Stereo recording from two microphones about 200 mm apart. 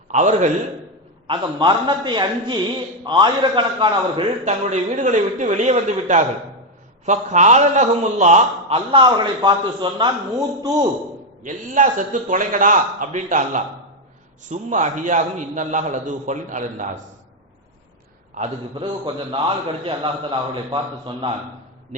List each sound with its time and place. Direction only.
0.1 s a man's voice: 35° right (ahead or behind)
1.3 s a man's voice: 25° right (ahead or behind)
4.4 s a man's voice: 35° right (ahead or behind)
11.4 s a man's voice: 40° right (ahead or behind)
18.3 s a man's voice: 25° right (ahead or behind)